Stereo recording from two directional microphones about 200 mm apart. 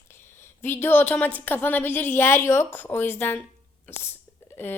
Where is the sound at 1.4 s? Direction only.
10° left (ahead or behind).